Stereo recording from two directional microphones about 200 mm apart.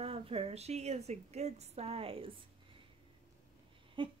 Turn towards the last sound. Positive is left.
turn(degrees=-25)  # may be behind; listen again after turning